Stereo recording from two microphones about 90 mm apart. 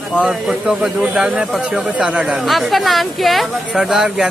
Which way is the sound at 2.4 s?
Centre (ahead or behind).